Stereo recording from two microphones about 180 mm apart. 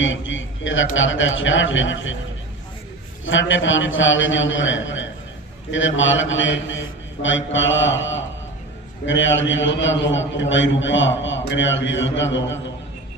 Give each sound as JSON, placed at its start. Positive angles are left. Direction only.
{"t": 0.0, "sound": "a man's voice", "side_deg": 90}
{"t": 3.2, "sound": "a man's voice", "side_deg": 90}